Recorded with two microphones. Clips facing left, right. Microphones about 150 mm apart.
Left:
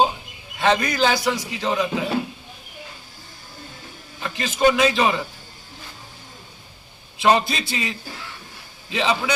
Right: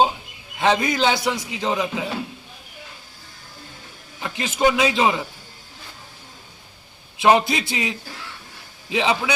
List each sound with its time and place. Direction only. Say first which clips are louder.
0.6 s a man's voice: even; 20° right (ahead or behind)
4.2 s a man's voice: left 1 dB; 20° right (ahead or behind)
7.2 s a man's voice: right 2 dB; 15° right (ahead or behind)